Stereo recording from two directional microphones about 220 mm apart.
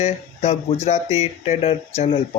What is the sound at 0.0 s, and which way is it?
Speech, 30° left (ahead or behind).